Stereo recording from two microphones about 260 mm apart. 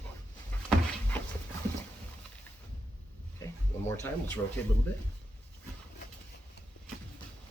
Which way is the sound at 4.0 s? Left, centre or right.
Centre.